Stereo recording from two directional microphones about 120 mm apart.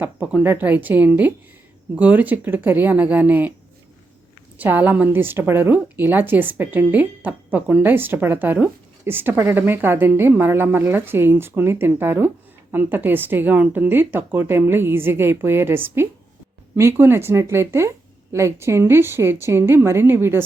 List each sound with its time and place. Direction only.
0.0 s a woman's voice: 10° right (ahead or behind)
4.5 s a woman's voice: 15° right (ahead or behind)